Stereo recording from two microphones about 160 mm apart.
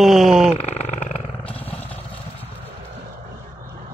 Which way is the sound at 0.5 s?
40° left (ahead or behind).